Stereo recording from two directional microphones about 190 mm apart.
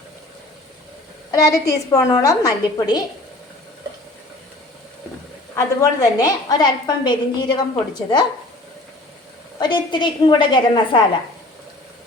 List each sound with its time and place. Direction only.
1.3 s a woman's voice: 15° left (ahead or behind)
5.5 s a woman's voice: 20° left (ahead or behind)
9.6 s a woman's voice: 25° left (ahead or behind)